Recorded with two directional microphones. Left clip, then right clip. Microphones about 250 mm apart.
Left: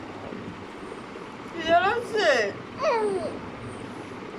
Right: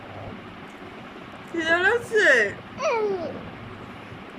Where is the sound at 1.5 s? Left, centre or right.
Right.